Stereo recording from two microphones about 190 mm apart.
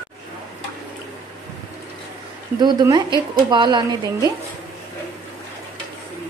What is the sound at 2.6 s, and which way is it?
A woman's voice, 20° right (ahead or behind).